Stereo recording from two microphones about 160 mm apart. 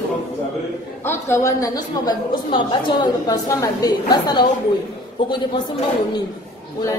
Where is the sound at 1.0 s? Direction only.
15° left (ahead or behind).